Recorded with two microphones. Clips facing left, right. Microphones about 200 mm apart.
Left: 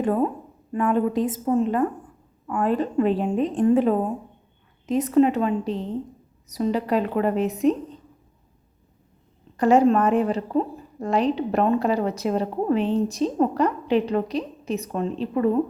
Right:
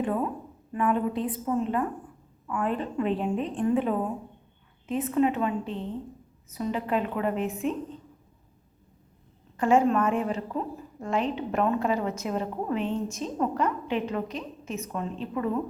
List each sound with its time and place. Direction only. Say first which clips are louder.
0.0 s a woman's voice: left 6 dB; 40° left (ahead or behind)
4.9 s a woman's voice: left 6 dB; 40° left (ahead or behind)
9.6 s a woman's voice: left 5 dB; 35° left (ahead or behind)